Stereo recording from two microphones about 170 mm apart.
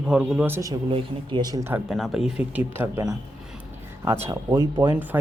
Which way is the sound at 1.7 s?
Centre (ahead or behind).